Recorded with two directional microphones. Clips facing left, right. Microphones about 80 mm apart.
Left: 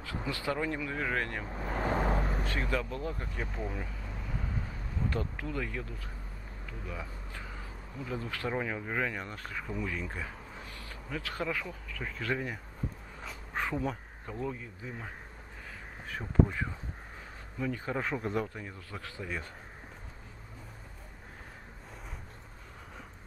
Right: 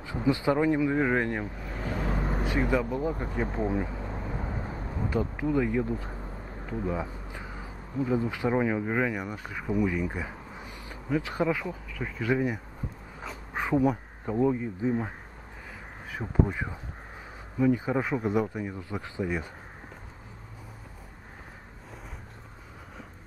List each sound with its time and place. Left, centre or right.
0.0 s speech: right
1.6 s vehicle: left
2.4 s speech: centre
3.4 s a sound: right
5.1 s speech: centre
7.2 s speech: centre
13.5 s bee: centre
14.4 s speech: right